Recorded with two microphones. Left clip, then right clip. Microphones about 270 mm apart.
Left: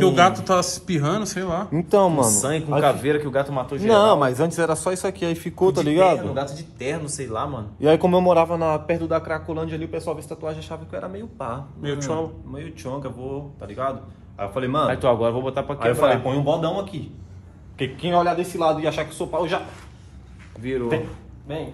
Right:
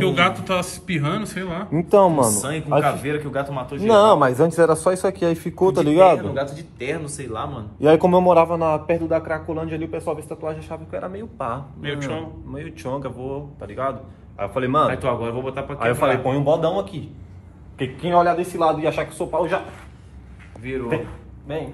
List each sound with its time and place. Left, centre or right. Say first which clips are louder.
0.5 s a man's voice: left 3 dB; centre
2.8 s a man's voice: left 2 dB; left
3.8 s a man's voice: right 2 dB; centre
6.4 s a man's voice: right 1 dB; left
7.8 s a man's voice: right 2 dB; centre
14.9 s a man's voice: left 3 dB; left
15.8 s a man's voice: even; centre
20.6 s a man's voice: left 2 dB; left
21.5 s a man's voice: right 2 dB; centre